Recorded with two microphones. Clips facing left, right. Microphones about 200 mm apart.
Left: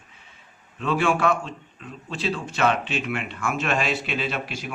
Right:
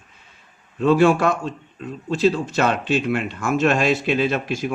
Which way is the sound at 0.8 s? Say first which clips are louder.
Right 7 dB; 40° right (ahead or behind).